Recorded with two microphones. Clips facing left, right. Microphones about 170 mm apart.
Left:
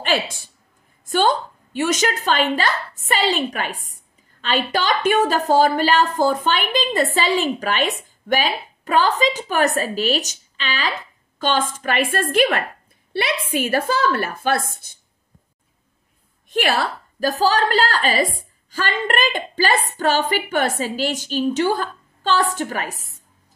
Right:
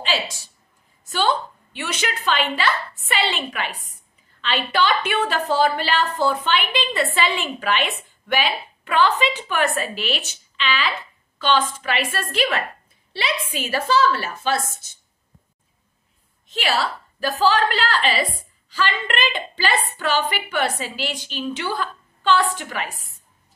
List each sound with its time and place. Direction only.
0.0 s a woman's voice: 55° left (ahead or behind)
16.4 s a woman's voice: 50° left (ahead or behind)